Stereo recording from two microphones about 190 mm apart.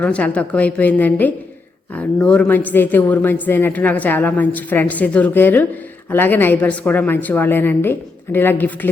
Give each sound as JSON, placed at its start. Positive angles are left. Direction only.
{"t": 0.0, "sound": "a woman's voice", "side_deg": 5}